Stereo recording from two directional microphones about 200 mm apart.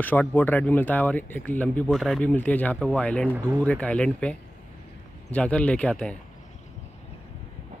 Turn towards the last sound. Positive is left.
turn(degrees=5)  # may be behind; listen again after turning